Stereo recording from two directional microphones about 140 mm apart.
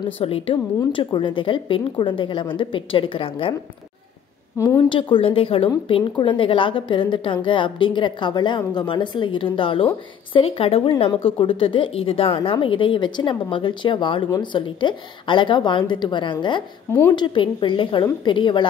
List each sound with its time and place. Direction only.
0.2 s a woman's voice: 45° left (ahead or behind)
4.8 s a woman's voice: 40° left (ahead or behind)